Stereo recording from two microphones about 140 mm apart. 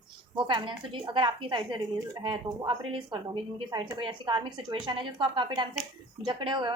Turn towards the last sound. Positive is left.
turn(degrees=-35)  # may be behind; listen again after turning